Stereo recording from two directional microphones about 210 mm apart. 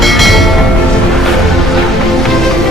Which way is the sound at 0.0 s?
Centre (ahead or behind).